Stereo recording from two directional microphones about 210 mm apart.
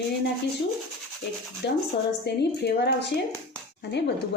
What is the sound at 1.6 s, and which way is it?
Speech, 55° left (ahead or behind).